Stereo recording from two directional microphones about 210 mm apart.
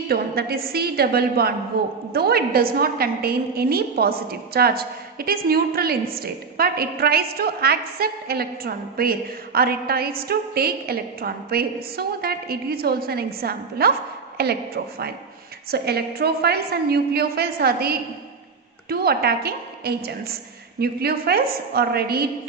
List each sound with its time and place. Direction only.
0.1 s a woman's voice: 45° right (ahead or behind)
15.7 s a woman's voice: 50° right (ahead or behind)